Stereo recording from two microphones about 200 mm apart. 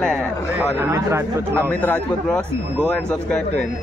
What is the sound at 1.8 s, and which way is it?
A man's voice, 5° left (ahead or behind).